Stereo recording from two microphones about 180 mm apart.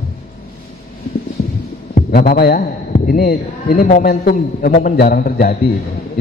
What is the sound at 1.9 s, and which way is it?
A man's voice, 50° left (ahead or behind).